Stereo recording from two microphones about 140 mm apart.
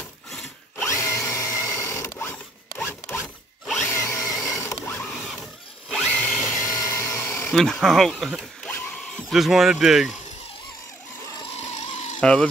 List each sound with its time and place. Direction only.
0.3 s wood: 5° left (ahead or behind)
1.0 s zipper: 20° left (ahead or behind)
3.2 s zipper: centre (ahead or behind)
3.8 s a sound: 20° left (ahead or behind)
4.9 s zipper: 5° left (ahead or behind)
5.9 s drill: 5° left (ahead or behind)
6.5 s a sound: 25° left (ahead or behind)
7.5 s speech: 5° left (ahead or behind)
11.8 s a sound: 50° left (ahead or behind)
12.2 s speech: 5° left (ahead or behind)